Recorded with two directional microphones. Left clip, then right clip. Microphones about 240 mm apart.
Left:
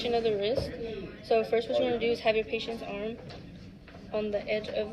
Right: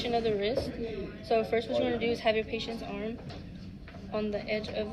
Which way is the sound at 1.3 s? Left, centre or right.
Right.